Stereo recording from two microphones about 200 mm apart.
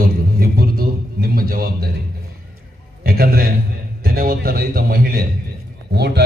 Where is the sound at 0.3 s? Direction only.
50° right (ahead or behind).